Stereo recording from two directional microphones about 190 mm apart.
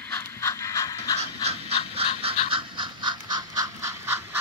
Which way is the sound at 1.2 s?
35° right (ahead or behind).